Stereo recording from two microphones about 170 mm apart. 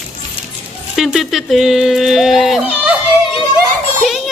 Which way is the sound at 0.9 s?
Centre (ahead or behind).